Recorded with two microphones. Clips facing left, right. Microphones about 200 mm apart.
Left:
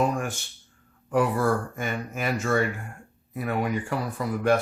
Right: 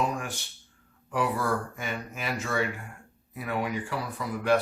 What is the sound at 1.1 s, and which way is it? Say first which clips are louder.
Speech: left 5 dB; 50° left (ahead or behind).